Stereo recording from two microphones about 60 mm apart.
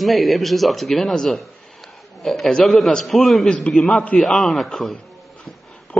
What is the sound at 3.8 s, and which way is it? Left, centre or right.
Speech, centre.